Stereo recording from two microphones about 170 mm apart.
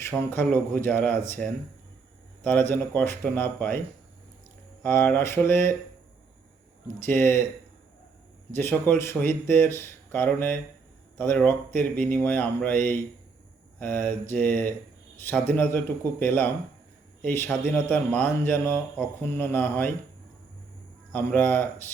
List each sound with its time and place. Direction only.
0.0 s a man's voice: 10° left (ahead or behind)
4.8 s a man's voice: 15° left (ahead or behind)
6.8 s a man's voice: 15° left (ahead or behind)
8.5 s a man's voice: 10° left (ahead or behind)
21.1 s a man's voice: 10° left (ahead or behind)